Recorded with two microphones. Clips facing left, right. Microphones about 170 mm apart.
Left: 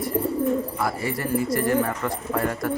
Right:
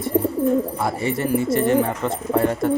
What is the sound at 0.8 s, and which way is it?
Speech, 25° right (ahead or behind).